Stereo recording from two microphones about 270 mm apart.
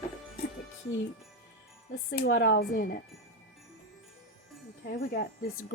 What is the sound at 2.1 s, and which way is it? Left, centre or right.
Speech, left.